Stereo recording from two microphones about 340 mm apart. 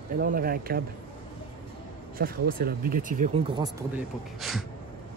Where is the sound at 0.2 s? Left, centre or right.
Right.